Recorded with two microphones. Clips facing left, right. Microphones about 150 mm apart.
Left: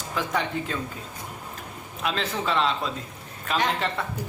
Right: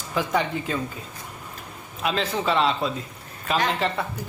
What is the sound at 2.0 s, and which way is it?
A man's voice, 5° right (ahead or behind).